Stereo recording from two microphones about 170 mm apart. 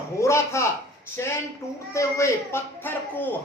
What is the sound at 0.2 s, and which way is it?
Speech, 15° left (ahead or behind).